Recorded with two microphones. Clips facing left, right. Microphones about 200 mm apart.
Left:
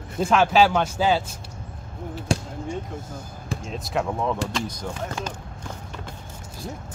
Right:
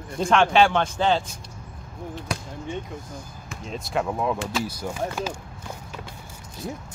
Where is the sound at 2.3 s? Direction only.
30° left (ahead or behind).